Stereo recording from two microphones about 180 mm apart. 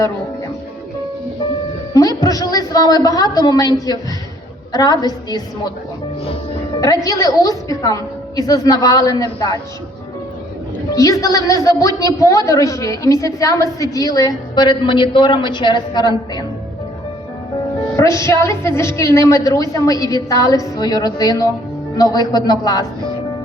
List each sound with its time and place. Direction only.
1.9 s a woman's voice: 20° left (ahead or behind)
6.7 s a woman's voice: 20° left (ahead or behind)
10.9 s a woman's voice: 20° left (ahead or behind)
17.9 s a woman's voice: 15° left (ahead or behind)